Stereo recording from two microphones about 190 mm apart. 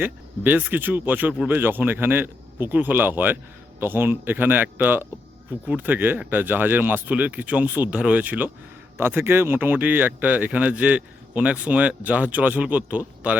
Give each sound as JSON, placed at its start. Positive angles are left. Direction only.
{"t": 0.0, "sound": "speech", "side_deg": -10}